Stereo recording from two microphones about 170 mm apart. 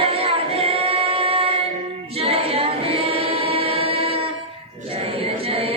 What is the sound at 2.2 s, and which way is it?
Choir, 35° right (ahead or behind).